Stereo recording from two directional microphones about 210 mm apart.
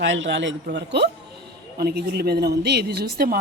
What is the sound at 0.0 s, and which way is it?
A woman's voice, 65° right (ahead or behind).